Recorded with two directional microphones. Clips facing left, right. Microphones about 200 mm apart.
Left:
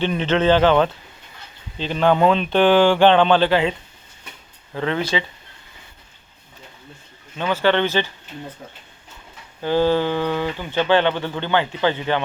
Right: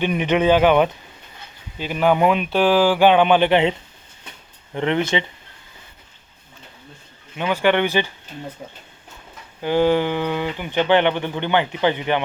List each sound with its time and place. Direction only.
0.0 s speech: 15° right (ahead or behind)
7.3 s speech: 15° right (ahead or behind)
9.6 s speech: 15° right (ahead or behind)